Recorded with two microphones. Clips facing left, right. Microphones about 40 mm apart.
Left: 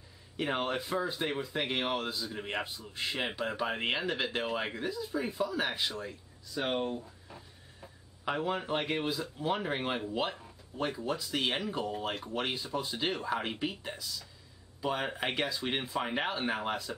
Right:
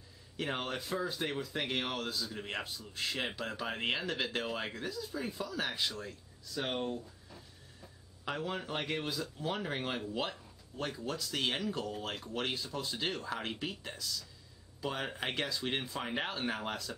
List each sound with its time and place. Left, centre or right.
0.4 s speech: centre